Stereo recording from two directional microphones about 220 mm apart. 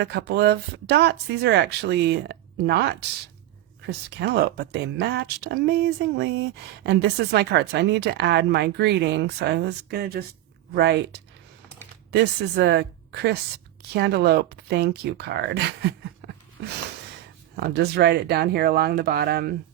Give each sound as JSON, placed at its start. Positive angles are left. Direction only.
{"t": 0.0, "sound": "a woman's voice", "side_deg": -50}
{"t": 17.6, "sound": "a woman's voice", "side_deg": -50}